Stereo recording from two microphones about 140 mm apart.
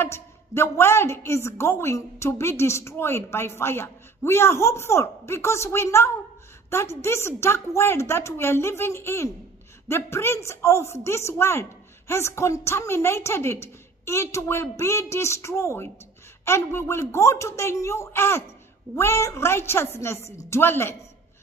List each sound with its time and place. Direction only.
0.0 s a woman's voice: 20° left (ahead or behind)